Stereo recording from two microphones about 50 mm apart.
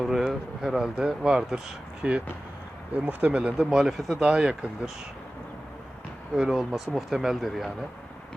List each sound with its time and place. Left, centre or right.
0.0 s speech: centre
2.9 s speech: right
3.8 s speech: centre
4.2 s speech: centre
6.3 s speech: centre